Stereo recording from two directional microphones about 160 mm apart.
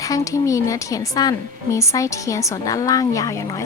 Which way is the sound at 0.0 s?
20° left (ahead or behind).